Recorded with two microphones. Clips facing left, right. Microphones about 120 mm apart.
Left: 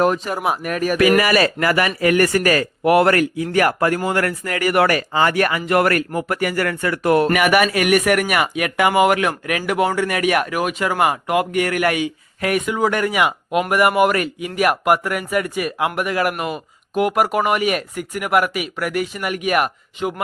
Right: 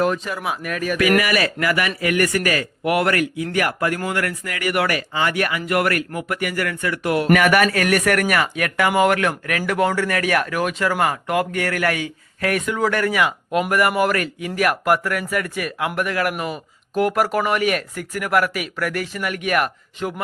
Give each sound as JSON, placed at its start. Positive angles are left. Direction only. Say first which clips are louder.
{"t": 0.0, "sound": "speech", "louder": "left 3 dB", "side_deg": 35}
{"t": 7.3, "sound": "a man's voice", "louder": "even", "side_deg": 10}
{"t": 16.9, "sound": "speech", "louder": "left 1 dB", "side_deg": 5}
{"t": 17.2, "sound": "a man's voice", "louder": "left 2 dB", "side_deg": 15}